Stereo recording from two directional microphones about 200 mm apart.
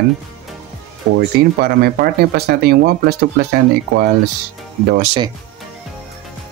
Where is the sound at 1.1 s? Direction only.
50° right (ahead or behind).